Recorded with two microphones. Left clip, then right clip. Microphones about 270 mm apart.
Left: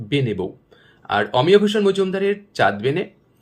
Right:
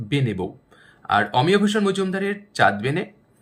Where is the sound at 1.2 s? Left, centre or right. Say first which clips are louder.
Left 7 dB; centre.